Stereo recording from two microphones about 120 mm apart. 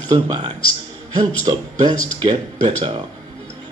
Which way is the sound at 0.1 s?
35° right (ahead or behind).